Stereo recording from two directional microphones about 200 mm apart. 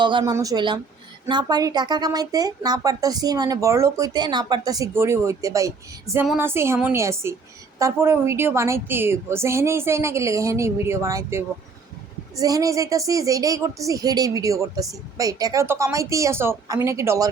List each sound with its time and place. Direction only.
0.0 s a woman's voice: 20° right (ahead or behind)